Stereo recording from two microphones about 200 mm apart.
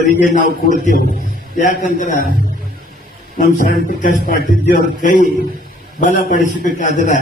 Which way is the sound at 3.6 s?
45° left (ahead or behind).